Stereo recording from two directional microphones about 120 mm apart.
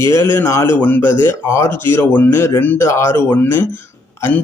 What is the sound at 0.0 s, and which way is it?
Speech, 20° left (ahead or behind).